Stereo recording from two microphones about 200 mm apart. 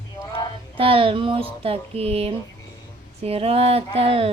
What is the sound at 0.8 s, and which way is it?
Speech, 25° right (ahead or behind).